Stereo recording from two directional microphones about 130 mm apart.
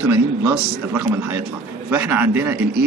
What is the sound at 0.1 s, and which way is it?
A man's voice, 20° right (ahead or behind).